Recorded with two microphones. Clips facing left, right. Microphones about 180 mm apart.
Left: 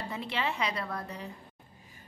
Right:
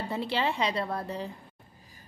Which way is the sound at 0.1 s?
30° right (ahead or behind).